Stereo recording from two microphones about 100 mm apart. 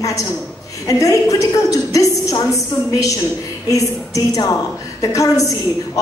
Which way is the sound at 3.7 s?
35° left (ahead or behind).